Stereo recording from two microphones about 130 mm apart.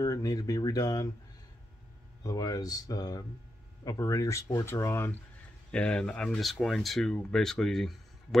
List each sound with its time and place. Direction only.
0.0 s speech: 25° left (ahead or behind)
2.2 s speech: 30° left (ahead or behind)
5.7 s speech: 5° left (ahead or behind)